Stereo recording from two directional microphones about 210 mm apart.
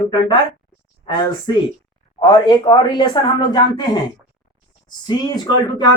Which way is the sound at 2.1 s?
20° left (ahead or behind).